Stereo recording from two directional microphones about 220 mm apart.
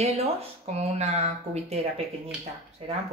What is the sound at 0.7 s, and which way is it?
Speech, 30° right (ahead or behind).